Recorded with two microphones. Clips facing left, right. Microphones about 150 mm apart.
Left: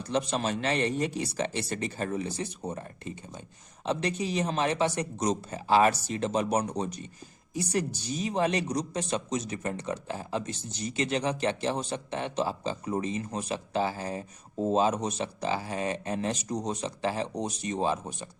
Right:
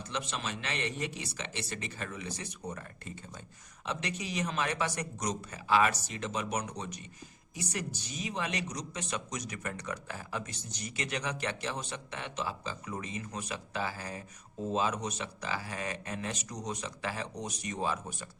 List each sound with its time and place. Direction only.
0.1 s speech: 35° left (ahead or behind)